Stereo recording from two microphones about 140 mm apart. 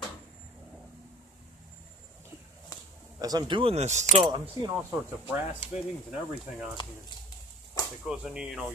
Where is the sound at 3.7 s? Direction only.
55° right (ahead or behind).